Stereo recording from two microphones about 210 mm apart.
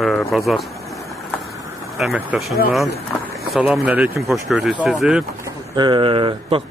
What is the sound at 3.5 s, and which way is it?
Speech, 5° right (ahead or behind).